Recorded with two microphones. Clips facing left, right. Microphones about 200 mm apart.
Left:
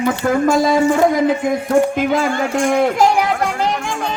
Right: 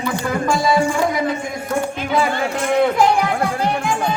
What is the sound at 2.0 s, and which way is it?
A man's voice, 45° left (ahead or behind).